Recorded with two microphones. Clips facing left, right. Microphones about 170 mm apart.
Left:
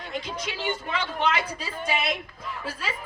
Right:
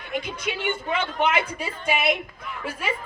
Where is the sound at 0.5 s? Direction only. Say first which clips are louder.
Right 4 dB; 20° right (ahead or behind).